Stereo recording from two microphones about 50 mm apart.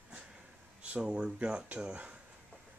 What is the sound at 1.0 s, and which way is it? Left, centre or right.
Speech, right.